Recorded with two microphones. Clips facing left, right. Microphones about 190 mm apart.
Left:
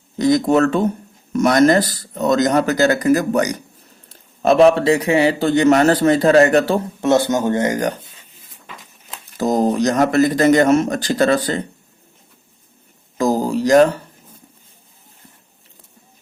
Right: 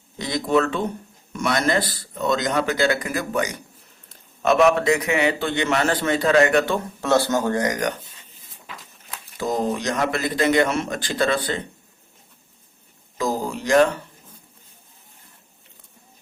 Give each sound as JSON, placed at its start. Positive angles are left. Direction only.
{"t": 0.2, "sound": "a man's voice", "side_deg": 45}
{"t": 7.0, "sound": "speech", "side_deg": 20}
{"t": 9.4, "sound": "a man's voice", "side_deg": 40}
{"t": 13.1, "sound": "a sound", "side_deg": 45}